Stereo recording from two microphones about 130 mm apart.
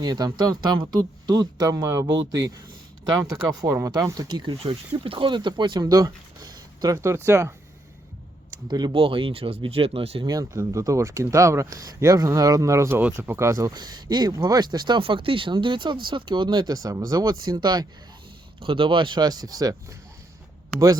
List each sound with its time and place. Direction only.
0.0 s speech: 30° right (ahead or behind)
8.6 s speech: 35° right (ahead or behind)
10.2 s speech: 25° right (ahead or behind)